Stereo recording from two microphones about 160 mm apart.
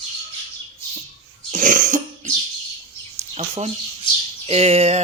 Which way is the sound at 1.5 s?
55° right (ahead or behind).